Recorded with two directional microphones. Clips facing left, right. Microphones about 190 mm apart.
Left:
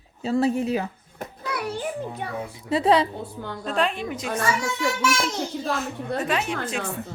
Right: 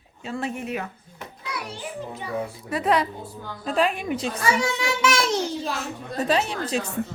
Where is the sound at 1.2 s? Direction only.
50° left (ahead or behind).